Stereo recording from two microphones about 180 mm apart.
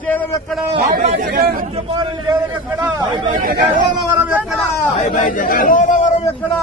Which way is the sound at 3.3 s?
50° right (ahead or behind).